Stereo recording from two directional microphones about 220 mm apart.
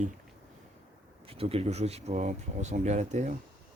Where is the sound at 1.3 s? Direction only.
25° right (ahead or behind).